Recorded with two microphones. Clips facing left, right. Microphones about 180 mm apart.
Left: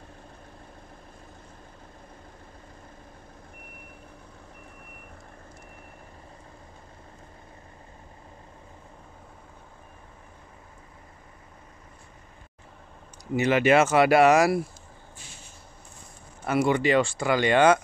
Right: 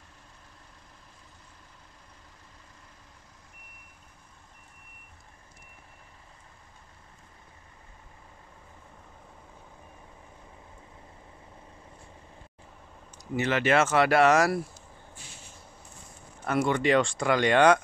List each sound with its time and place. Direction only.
13.4 s speech: 15° left (ahead or behind)
16.4 s speech: 10° left (ahead or behind)